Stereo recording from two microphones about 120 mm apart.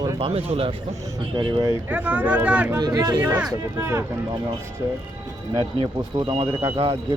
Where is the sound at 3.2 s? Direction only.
15° right (ahead or behind).